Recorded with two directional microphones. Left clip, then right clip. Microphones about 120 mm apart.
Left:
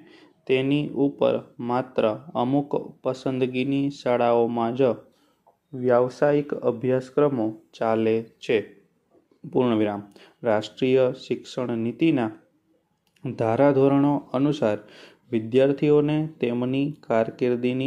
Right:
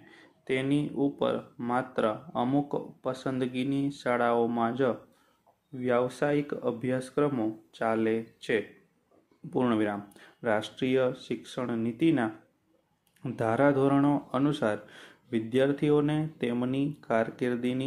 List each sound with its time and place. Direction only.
0.1 s speech: 20° left (ahead or behind)
5.8 s speech: 10° left (ahead or behind)
7.4 s speech: 20° left (ahead or behind)